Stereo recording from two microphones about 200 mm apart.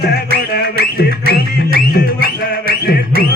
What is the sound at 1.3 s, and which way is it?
Music, 50° left (ahead or behind).